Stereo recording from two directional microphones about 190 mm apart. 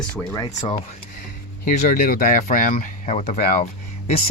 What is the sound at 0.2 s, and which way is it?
Speech, 15° left (ahead or behind).